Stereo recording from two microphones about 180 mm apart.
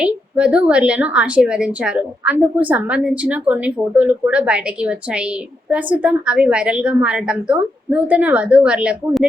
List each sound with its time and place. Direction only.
0.0 s a woman's voice: 5° right (ahead or behind)